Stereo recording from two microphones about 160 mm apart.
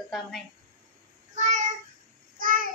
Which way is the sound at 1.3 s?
50° right (ahead or behind).